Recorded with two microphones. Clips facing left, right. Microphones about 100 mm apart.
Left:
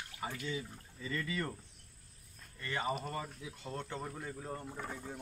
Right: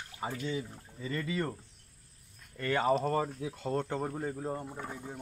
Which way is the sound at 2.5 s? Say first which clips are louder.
Right 9 dB; 65° right (ahead or behind).